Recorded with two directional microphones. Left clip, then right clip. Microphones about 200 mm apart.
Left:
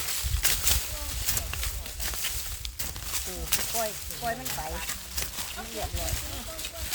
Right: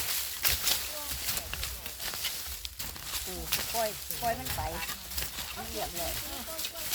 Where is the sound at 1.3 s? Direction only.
40° left (ahead or behind).